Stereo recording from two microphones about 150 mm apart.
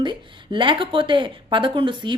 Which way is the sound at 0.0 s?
30° right (ahead or behind).